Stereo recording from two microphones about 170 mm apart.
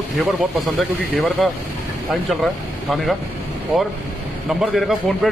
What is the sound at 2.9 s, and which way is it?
Speech, centre (ahead or behind).